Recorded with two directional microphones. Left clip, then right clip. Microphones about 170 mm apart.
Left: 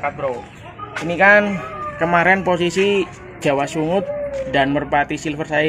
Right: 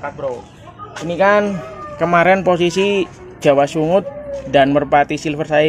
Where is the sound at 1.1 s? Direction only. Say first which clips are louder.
Left 1 dB; 60° right (ahead or behind).